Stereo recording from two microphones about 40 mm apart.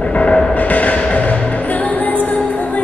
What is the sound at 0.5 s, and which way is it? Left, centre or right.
Music, left.